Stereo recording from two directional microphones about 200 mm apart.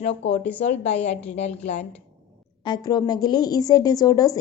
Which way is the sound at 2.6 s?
20° left (ahead or behind).